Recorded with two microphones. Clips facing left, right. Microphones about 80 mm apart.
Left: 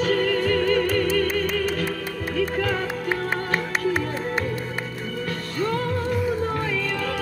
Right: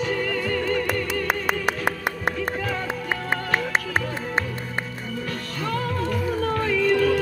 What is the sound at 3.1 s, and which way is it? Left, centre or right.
Music, right.